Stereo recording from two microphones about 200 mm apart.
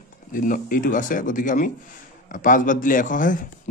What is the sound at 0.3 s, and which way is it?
A man's voice, 45° left (ahead or behind).